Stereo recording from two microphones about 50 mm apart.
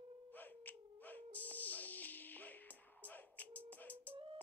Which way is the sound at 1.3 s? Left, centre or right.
Left.